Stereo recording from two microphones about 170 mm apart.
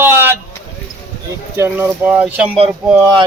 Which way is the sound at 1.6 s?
10° right (ahead or behind).